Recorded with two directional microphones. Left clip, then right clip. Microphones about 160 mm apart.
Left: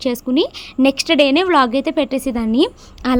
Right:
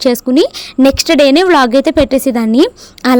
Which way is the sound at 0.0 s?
50° right (ahead or behind).